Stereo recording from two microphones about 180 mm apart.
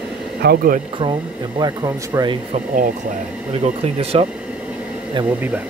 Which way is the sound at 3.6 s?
35° right (ahead or behind).